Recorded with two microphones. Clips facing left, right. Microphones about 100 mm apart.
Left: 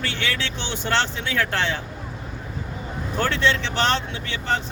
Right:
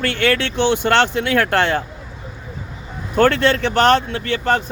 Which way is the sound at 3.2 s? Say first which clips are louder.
Right 8 dB; 55° right (ahead or behind).